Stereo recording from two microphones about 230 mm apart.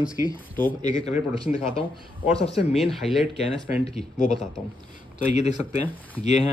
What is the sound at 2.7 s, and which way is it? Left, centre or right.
Speech, centre.